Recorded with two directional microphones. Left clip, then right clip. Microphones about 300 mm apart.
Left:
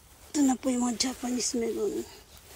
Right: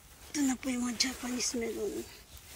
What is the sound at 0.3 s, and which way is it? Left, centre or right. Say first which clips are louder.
Speech: left 6 dB; centre.